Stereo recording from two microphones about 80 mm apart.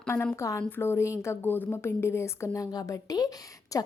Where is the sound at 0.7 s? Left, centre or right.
Left.